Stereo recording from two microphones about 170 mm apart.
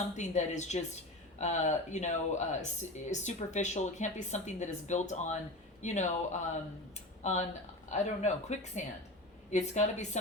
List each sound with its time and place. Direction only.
0.2 s speech: 45° left (ahead or behind)
6.9 s a sound: 45° left (ahead or behind)
7.9 s speech: 45° left (ahead or behind)